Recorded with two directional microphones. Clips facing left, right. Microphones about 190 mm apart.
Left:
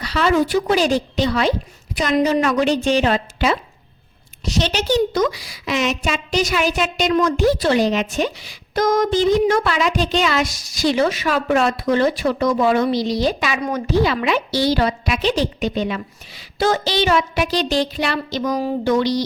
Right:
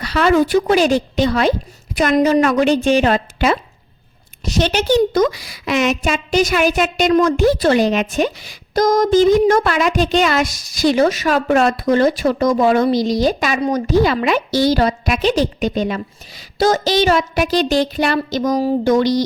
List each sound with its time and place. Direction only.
0.0 s a woman's voice: 55° right (ahead or behind)